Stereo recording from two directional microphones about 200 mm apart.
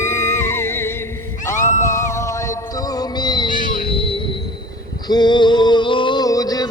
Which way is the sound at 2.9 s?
20° left (ahead or behind).